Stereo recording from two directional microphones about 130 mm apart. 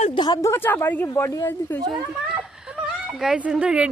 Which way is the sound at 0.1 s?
35° left (ahead or behind).